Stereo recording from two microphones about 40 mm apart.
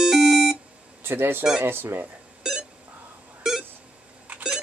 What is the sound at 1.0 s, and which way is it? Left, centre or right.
Speech, right.